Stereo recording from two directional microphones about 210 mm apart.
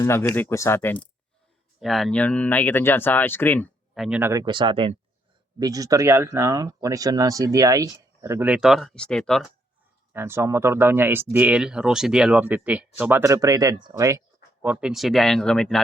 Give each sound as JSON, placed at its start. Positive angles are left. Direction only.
{"t": 0.0, "sound": "speech", "side_deg": 15}
{"t": 1.8, "sound": "speech", "side_deg": 0}
{"t": 10.1, "sound": "speech", "side_deg": -10}